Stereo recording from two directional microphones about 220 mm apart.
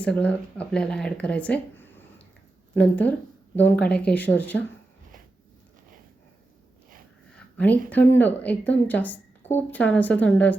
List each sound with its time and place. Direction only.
0.0 s speech: 5° left (ahead or behind)
7.5 s speech: 5° left (ahead or behind)